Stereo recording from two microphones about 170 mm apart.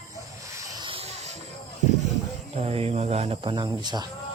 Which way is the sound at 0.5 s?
20° right (ahead or behind).